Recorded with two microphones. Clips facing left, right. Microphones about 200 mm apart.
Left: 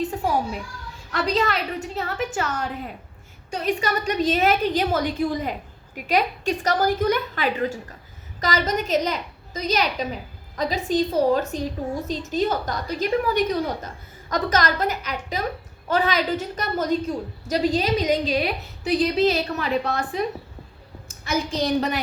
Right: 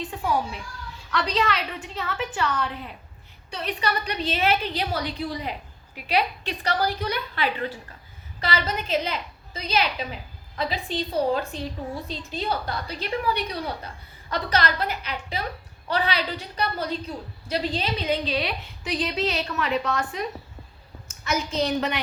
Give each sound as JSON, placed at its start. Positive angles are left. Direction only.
{"t": 0.0, "sound": "a child's voice", "side_deg": 40}
{"t": 21.6, "sound": "a woman's voice", "side_deg": 40}